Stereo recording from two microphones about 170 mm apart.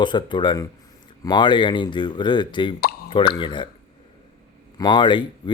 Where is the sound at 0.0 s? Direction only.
25° left (ahead or behind).